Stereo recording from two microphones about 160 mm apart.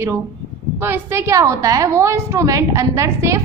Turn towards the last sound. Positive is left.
turn(degrees=-20)  # may be behind; listen again after turning